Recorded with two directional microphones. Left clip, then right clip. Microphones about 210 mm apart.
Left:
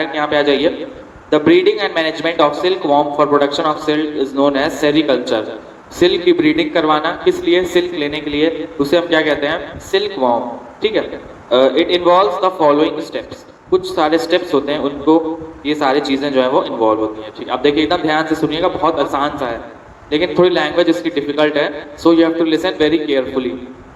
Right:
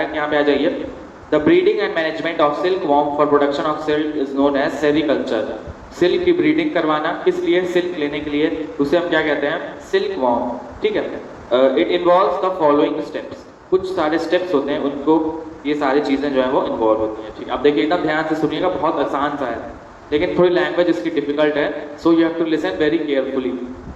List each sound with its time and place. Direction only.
0.0 s a man's voice: 50° left (ahead or behind)